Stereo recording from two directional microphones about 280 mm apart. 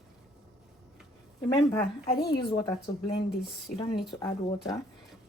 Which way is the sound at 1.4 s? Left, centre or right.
Centre.